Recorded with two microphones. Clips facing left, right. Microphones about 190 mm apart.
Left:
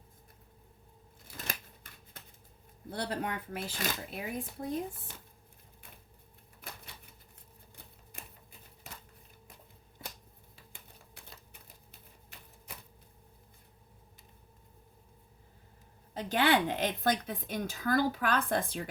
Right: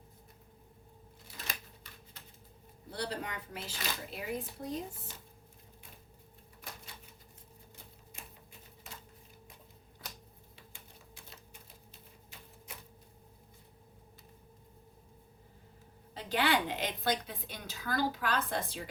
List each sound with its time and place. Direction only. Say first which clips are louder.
2.9 s a woman's voice: left 3 dB; 55° left (ahead or behind)
16.1 s a woman's voice: left 3 dB; 50° left (ahead or behind)